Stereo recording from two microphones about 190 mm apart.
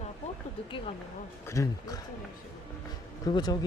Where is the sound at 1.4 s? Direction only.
15° left (ahead or behind).